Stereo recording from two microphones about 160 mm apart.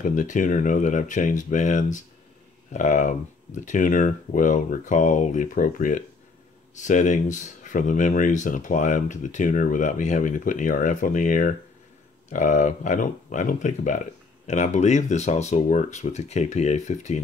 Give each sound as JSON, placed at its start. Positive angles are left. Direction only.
{"t": 0.1, "sound": "speech", "side_deg": 55}